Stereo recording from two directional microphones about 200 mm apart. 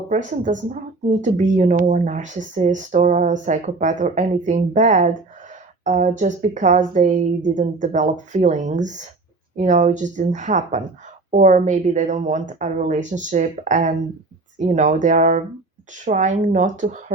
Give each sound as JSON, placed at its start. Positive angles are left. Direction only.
{"t": 0.3, "sound": "speech", "side_deg": -40}